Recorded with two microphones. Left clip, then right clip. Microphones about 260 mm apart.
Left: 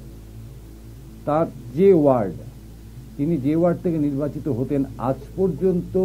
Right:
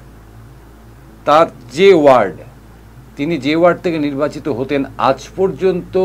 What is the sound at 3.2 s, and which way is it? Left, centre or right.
Speech, centre.